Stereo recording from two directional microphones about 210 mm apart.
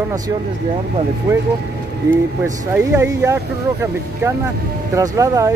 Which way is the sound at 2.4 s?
10° right (ahead or behind).